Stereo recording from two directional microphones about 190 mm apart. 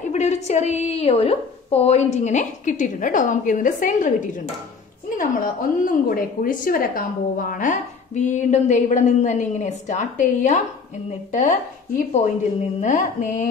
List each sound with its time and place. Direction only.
0.1 s a woman's voice: 35° left (ahead or behind)
12.0 s a woman's voice: 35° left (ahead or behind)
12.8 s music: 40° left (ahead or behind)